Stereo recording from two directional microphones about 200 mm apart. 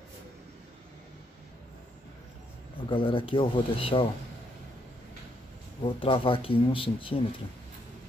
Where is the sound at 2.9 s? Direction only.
25° left (ahead or behind).